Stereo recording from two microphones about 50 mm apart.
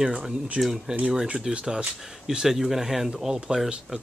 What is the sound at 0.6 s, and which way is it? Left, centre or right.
Speech, centre.